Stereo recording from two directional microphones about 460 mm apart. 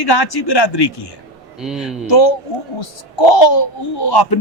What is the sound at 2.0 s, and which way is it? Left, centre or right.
A man's voice, left.